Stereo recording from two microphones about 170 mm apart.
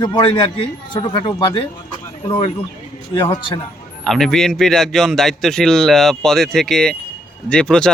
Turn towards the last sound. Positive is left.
turn(degrees=5)  # may be behind; listen again after turning